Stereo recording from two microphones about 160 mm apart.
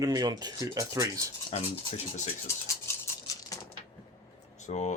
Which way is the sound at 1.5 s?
45° left (ahead or behind).